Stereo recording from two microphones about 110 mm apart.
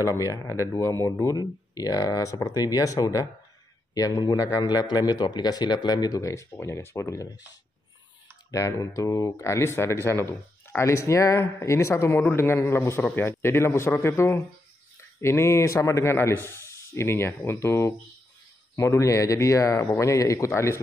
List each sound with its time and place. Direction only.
0.0 s speech: 30° left (ahead or behind)
8.5 s speech: 30° left (ahead or behind)